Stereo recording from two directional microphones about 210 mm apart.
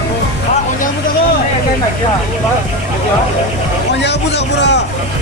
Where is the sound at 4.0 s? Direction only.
55° left (ahead or behind).